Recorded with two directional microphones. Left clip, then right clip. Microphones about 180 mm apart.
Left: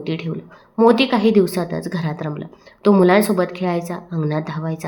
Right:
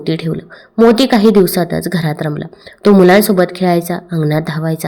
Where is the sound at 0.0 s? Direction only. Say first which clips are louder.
Right 7 dB; 30° right (ahead or behind).